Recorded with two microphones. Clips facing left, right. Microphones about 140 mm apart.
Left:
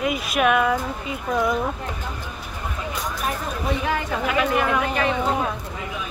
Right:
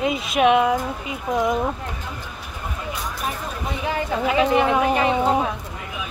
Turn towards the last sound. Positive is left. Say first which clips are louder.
# right 3 dB
turn(degrees=-20)  # may be behind; listen again after turning